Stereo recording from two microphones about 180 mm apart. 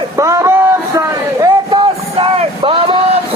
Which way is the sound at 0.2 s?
15° right (ahead or behind).